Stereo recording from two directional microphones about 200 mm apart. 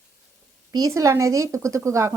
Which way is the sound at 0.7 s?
20° right (ahead or behind).